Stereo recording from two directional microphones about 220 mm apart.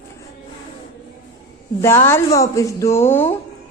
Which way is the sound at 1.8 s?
10° left (ahead or behind).